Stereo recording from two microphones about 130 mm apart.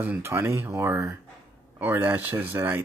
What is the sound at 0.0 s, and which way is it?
Speech, 15° right (ahead or behind).